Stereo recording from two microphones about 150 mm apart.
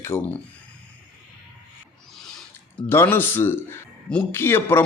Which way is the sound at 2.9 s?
15° left (ahead or behind).